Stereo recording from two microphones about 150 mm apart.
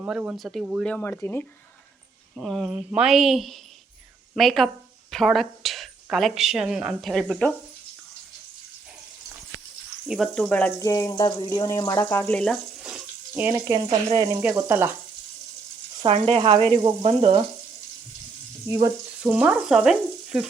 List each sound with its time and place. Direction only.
0.0 s speech: 10° right (ahead or behind)
0.9 s speech: 10° left (ahead or behind)
2.3 s a woman's voice: centre (ahead or behind)
10.1 s speech: 5° left (ahead or behind)
10.8 s speech: 20° left (ahead or behind)
12.0 s speech: 10° left (ahead or behind); by 13.6 s 10° right (ahead or behind)
13.7 s speech: 25° right (ahead or behind)
16.0 s frying: 40° right (ahead or behind)
19.2 s frying: 5° right (ahead or behind)